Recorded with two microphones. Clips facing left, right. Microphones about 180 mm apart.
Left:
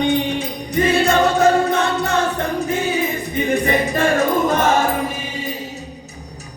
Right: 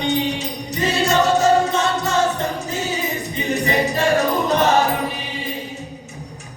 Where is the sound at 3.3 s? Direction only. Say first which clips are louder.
Left 3 dB; 55° left (ahead or behind).